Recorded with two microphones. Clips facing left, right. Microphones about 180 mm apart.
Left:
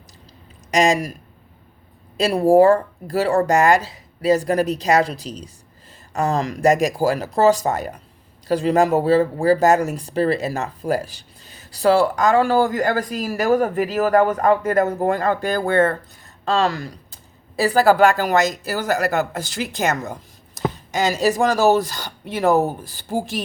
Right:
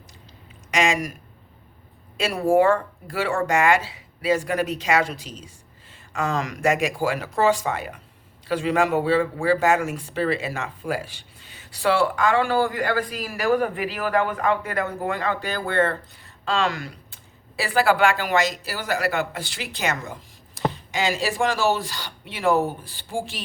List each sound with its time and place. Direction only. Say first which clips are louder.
0.7 s speech: left 5 dB; 40° left (ahead or behind)
2.1 s speech: left 5 dB; 35° left (ahead or behind)
20.6 s a sound: left 1 dB; 45° left (ahead or behind)
20.9 s speech: left 8 dB; 40° left (ahead or behind)